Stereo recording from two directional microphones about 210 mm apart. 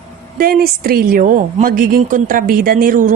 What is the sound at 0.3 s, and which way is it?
A woman's voice, 45° right (ahead or behind).